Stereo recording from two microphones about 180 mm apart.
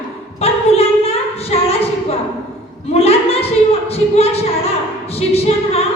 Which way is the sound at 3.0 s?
35° left (ahead or behind).